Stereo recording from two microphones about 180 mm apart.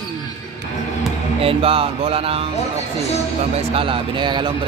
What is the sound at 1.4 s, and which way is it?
Speech, 30° right (ahead or behind).